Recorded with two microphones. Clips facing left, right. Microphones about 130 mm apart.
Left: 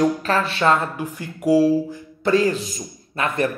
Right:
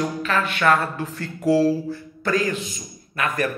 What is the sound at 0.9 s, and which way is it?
Speech, 15° left (ahead or behind).